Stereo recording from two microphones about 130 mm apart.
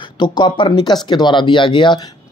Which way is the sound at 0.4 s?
40° left (ahead or behind).